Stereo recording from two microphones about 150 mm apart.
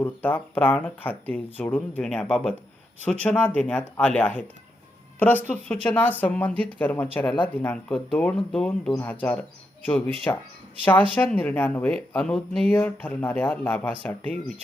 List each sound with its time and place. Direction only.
0.0 s speech: 10° left (ahead or behind)
5.5 s speech: 10° left (ahead or behind)
11.1 s speech: 5° left (ahead or behind)